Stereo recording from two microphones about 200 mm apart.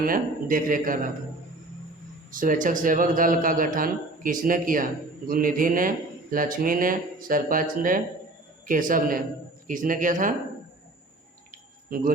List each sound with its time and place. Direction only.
0.0 s speech: 45° right (ahead or behind)
2.3 s a man's voice: 40° right (ahead or behind)
11.9 s speech: 45° right (ahead or behind)